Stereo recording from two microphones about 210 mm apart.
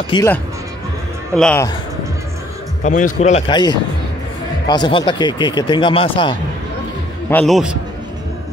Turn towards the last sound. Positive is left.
turn(degrees=0)  # may be behind; listen again after turning